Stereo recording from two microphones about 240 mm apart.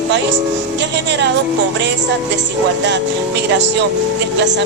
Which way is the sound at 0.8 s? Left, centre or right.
Right.